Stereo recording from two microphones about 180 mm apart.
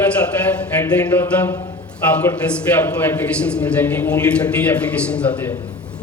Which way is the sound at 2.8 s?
10° left (ahead or behind).